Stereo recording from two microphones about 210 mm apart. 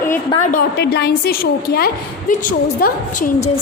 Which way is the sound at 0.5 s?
50° left (ahead or behind).